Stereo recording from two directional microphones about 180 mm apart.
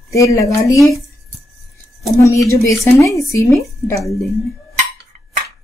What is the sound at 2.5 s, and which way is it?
Speech, 15° left (ahead or behind).